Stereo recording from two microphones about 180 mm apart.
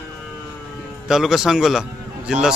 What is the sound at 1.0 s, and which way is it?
A man's voice, centre (ahead or behind).